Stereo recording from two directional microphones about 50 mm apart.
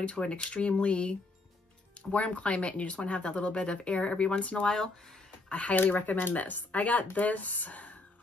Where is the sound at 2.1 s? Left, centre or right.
Left.